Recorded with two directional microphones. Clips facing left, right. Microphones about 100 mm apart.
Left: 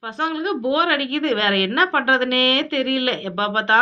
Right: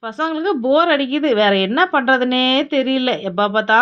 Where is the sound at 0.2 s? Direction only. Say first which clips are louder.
Right 4 dB; 30° right (ahead or behind).